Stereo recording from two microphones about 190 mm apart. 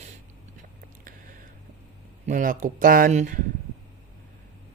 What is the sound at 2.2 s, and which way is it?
Speech, 45° right (ahead or behind).